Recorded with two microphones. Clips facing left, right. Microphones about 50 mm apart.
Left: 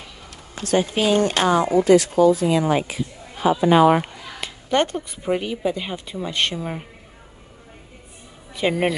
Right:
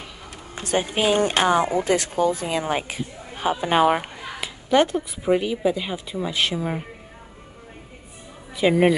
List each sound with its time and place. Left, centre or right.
0.6 s speech: centre
2.4 s speech: right
4.4 s speech: centre
8.5 s speech: centre